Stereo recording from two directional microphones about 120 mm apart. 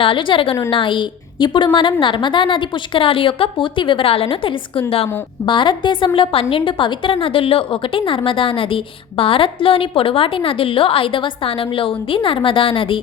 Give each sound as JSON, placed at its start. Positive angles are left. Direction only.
{"t": 0.0, "sound": "a woman's voice", "side_deg": 45}